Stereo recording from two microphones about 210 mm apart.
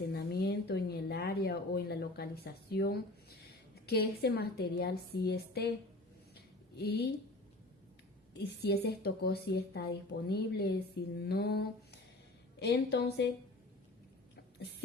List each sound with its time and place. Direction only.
0.1 s a sound: 50° left (ahead or behind)
3.8 s a woman's voice: 50° left (ahead or behind)
6.7 s a woman's voice: 50° left (ahead or behind)
8.3 s a woman's voice: 50° left (ahead or behind)